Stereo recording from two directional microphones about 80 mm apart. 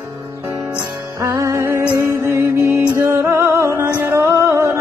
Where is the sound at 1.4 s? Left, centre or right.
Right.